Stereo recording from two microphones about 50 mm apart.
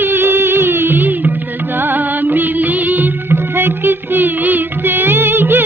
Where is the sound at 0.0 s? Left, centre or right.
Right.